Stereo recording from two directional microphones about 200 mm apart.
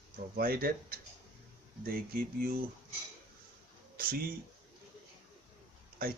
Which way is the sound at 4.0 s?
45° right (ahead or behind).